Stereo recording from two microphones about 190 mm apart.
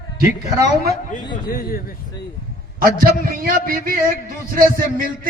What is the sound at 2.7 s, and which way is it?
A man's voice, 50° right (ahead or behind).